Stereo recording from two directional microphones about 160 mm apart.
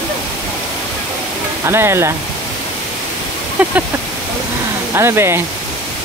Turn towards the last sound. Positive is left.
turn(degrees=-15)  # may be behind; listen again after turning